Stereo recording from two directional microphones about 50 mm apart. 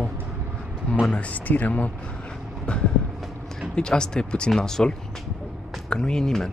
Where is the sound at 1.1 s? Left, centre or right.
Left.